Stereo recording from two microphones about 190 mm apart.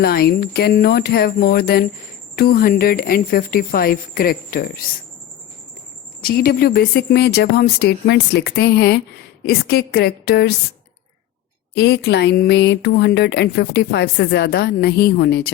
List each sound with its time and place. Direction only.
0.0 s speech: 55° left (ahead or behind)
6.2 s speech: 50° left (ahead or behind)
11.7 s speech: 60° left (ahead or behind)